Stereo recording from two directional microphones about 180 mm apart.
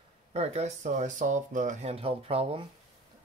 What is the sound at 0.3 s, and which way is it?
Speech, 35° right (ahead or behind).